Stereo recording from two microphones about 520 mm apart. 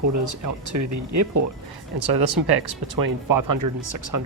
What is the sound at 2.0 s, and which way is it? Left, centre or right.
Speech, right.